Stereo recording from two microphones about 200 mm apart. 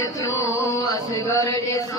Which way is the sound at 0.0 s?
15° left (ahead or behind).